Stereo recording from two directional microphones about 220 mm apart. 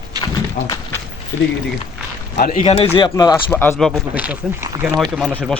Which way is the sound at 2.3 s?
40° left (ahead or behind).